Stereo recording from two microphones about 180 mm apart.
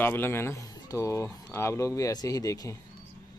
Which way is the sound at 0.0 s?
10° left (ahead or behind).